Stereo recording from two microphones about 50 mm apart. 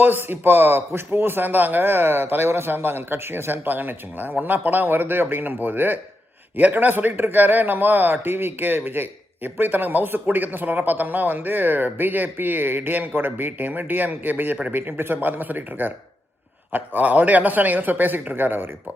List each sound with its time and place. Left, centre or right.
0.0 s speech: right